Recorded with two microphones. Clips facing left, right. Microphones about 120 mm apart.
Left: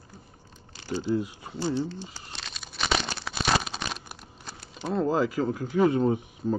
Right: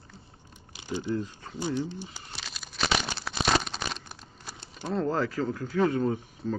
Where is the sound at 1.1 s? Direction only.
10° left (ahead or behind).